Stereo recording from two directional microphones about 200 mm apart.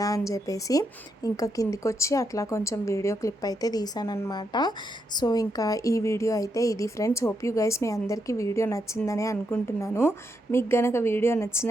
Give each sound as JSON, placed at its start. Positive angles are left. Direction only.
{"t": 0.0, "sound": "speech", "side_deg": 15}